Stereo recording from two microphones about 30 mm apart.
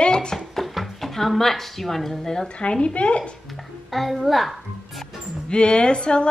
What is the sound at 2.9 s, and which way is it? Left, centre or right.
Speech, left.